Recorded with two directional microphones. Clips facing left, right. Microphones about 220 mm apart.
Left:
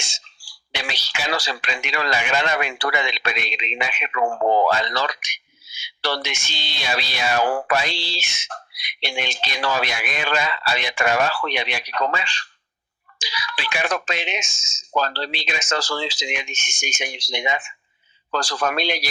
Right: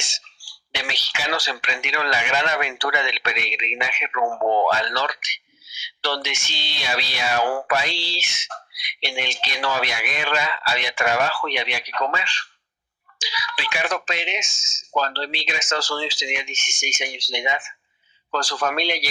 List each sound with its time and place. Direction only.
0.7 s speech: 45° left (ahead or behind)